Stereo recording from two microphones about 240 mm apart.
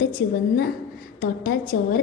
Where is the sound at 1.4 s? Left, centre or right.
Left.